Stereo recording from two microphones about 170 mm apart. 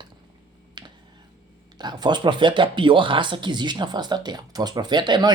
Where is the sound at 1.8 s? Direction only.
25° right (ahead or behind).